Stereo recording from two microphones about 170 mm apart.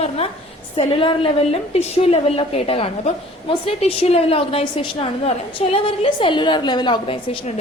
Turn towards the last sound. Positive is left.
turn(degrees=25)  # may be behind; listen again after turning